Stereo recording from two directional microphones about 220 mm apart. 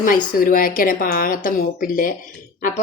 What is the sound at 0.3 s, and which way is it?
Speech, 40° left (ahead or behind).